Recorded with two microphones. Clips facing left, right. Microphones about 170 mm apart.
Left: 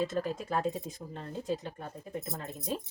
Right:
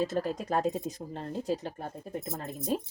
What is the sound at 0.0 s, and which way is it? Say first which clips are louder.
Speech: right 2 dB; 40° right (ahead or behind).